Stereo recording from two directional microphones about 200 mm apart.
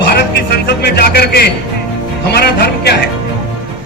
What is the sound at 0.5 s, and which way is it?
A man's voice, 55° left (ahead or behind).